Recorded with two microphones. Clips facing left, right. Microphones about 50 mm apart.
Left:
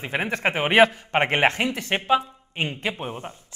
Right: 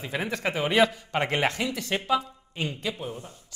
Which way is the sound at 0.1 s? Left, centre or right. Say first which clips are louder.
Left 4 dB; left.